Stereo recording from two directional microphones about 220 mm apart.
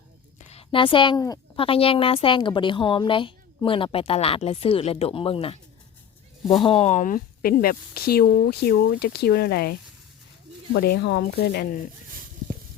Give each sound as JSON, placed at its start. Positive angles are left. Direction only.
{"t": 0.3, "sound": "a woman's voice", "side_deg": 25}
{"t": 10.8, "sound": "speech", "side_deg": 45}